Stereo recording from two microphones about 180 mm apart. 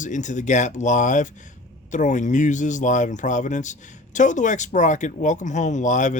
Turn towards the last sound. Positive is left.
turn(degrees=45)  # may be behind; listen again after turning